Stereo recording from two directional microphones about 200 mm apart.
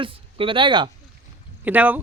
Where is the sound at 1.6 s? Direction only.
10° right (ahead or behind).